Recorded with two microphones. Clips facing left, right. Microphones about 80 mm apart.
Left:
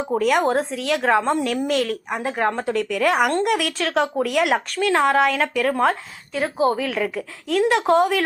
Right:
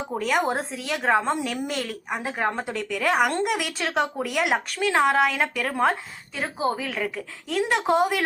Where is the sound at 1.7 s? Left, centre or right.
Left.